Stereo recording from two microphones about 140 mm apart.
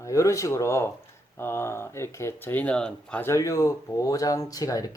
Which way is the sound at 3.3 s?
25° left (ahead or behind).